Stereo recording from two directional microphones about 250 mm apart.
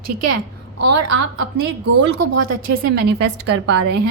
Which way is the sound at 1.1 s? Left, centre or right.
Right.